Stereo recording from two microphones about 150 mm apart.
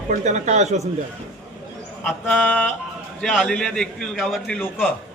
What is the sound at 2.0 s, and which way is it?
A man's voice, 10° left (ahead or behind).